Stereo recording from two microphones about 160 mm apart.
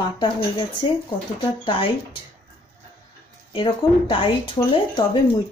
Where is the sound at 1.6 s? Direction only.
35° left (ahead or behind).